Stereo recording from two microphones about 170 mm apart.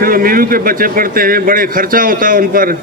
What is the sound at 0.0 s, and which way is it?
A man's voice, 60° right (ahead or behind).